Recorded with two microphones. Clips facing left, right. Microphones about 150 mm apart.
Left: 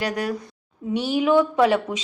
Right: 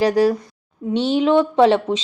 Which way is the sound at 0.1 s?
30° right (ahead or behind).